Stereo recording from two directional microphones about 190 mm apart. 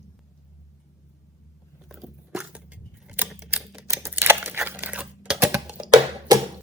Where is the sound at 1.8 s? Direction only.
Centre (ahead or behind).